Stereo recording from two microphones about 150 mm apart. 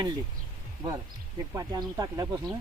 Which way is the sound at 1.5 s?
25° right (ahead or behind).